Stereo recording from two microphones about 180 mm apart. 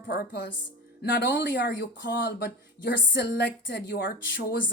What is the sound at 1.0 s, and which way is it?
Speech, 75° left (ahead or behind).